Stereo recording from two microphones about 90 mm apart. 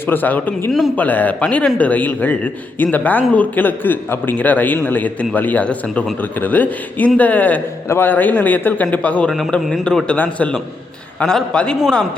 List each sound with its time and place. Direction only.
0.1 s a man's voice: 20° left (ahead or behind)